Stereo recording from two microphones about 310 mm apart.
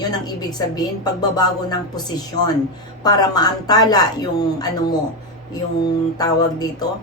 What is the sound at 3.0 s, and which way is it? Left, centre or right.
A woman's voice, centre.